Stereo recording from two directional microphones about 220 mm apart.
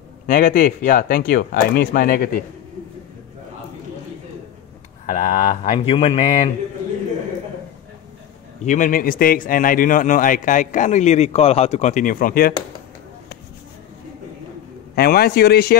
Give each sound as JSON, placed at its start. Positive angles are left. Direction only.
{"t": 0.3, "sound": "speech", "side_deg": 40}
{"t": 5.0, "sound": "speech", "side_deg": 35}
{"t": 8.6, "sound": "speech", "side_deg": 35}
{"t": 15.0, "sound": "a man's voice", "side_deg": 45}